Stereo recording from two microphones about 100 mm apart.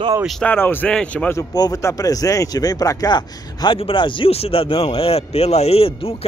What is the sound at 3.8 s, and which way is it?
Speech, 60° left (ahead or behind).